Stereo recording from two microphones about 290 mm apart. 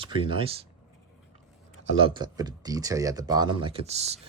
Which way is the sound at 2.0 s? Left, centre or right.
Centre.